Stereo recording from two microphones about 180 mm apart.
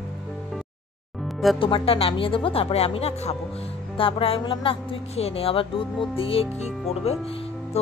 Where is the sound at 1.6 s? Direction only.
30° left (ahead or behind).